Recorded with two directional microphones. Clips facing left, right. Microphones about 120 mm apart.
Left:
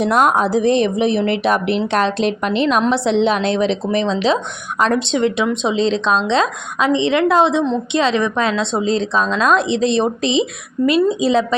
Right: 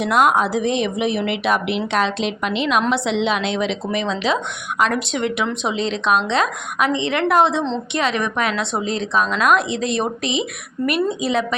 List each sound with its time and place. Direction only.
0.0 s a woman's voice: 40° left (ahead or behind)